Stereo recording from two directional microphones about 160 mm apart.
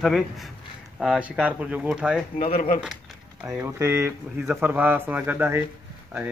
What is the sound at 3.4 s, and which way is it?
Speech, 20° right (ahead or behind).